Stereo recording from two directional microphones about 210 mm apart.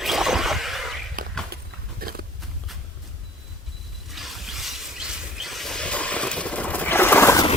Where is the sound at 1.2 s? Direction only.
40° right (ahead or behind).